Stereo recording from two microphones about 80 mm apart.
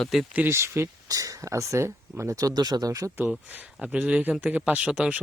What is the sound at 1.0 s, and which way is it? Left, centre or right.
Speech, right.